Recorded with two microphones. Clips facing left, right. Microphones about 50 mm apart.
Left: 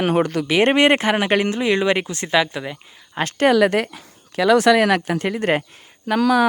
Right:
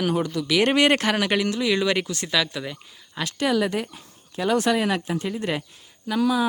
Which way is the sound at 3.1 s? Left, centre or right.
Left.